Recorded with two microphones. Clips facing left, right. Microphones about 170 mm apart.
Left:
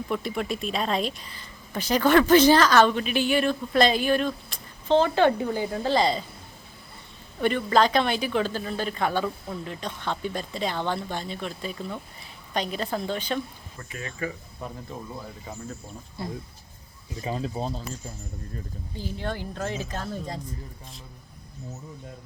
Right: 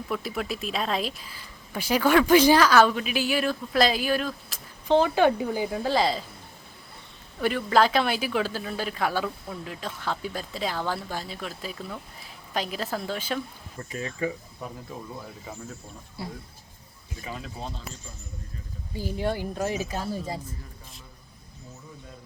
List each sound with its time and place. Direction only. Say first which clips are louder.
0.1 s speech: left 1 dB; centre (ahead or behind)
7.4 s speech: left 1 dB; 5° right (ahead or behind)
13.7 s speech: right 4 dB; 35° right (ahead or behind)
16.2 s speech: left 2 dB; 10° right (ahead or behind)
17.2 s speech: left 7 dB; 30° left (ahead or behind)
18.9 s speech: right 4 dB; 10° right (ahead or behind)